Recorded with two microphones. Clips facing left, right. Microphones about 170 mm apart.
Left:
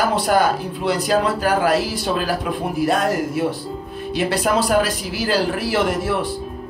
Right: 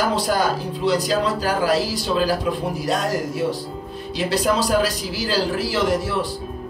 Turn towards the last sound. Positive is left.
turn(degrees=55)  # may be behind; listen again after turning